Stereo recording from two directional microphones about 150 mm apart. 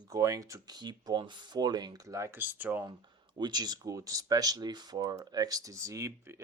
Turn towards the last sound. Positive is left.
turn(degrees=-20)  # may be behind; listen again after turning